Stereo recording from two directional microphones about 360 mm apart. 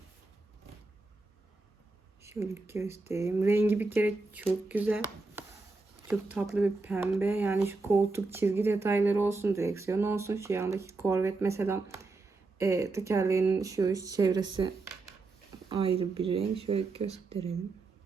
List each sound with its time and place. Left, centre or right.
2.2 s speech: centre
4.7 s chopping: centre
6.1 s speech: centre
15.7 s speech: centre